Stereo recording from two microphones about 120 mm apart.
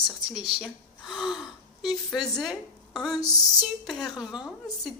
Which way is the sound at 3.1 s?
30° left (ahead or behind).